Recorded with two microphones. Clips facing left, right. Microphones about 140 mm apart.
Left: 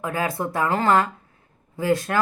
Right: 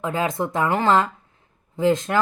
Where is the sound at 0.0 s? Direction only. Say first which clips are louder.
Right 2 dB; 20° right (ahead or behind).